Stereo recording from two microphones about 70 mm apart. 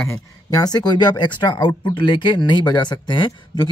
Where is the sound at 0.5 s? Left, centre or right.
Left.